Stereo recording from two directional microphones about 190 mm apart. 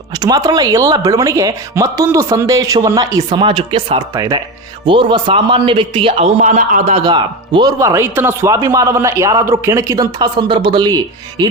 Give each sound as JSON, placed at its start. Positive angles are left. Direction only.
{"t": 0.2, "sound": "a man's voice", "side_deg": -20}